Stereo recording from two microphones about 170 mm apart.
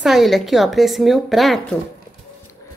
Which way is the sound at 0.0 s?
Centre (ahead or behind).